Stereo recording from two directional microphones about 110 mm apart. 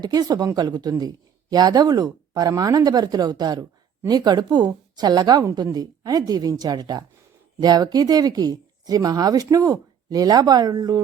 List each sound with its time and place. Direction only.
0.0 s speech: 35° right (ahead or behind)